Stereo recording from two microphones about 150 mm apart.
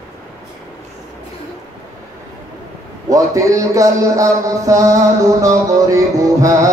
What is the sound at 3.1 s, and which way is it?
A man's voice, 20° right (ahead or behind).